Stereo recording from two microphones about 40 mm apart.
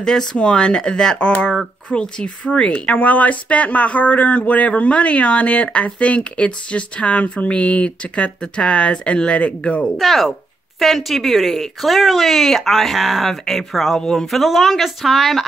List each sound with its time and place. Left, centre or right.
0.0 s speech: centre
2.7 s speech: left
9.9 s speech: centre
14.3 s speech: centre